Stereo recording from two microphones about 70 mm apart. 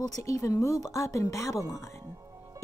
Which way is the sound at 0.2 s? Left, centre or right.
Left.